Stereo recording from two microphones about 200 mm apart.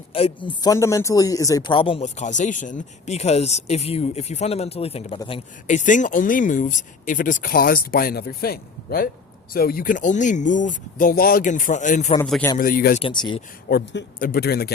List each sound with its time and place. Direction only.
0.1 s speech: 25° left (ahead or behind)
12.2 s a man's voice: 5° left (ahead or behind)
12.5 s speech: 45° left (ahead or behind)
13.0 s speech: 25° left (ahead or behind)
13.7 s speech: 50° left (ahead or behind)